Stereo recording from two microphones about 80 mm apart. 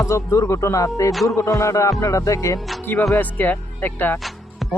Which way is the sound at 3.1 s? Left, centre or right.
Left.